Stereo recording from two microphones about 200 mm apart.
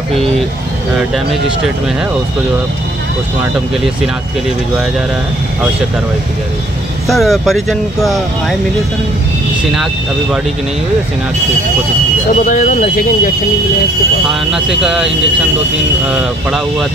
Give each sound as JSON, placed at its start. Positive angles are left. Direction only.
{"t": 7.1, "sound": "speech", "side_deg": 0}
{"t": 12.4, "sound": "speech", "side_deg": 40}
{"t": 14.5, "sound": "speech", "side_deg": -5}